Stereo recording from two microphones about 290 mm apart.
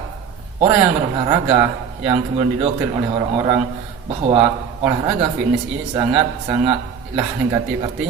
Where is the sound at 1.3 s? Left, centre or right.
Centre.